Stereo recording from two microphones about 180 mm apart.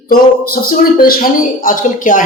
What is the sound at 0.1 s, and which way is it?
A woman's voice, 55° left (ahead or behind).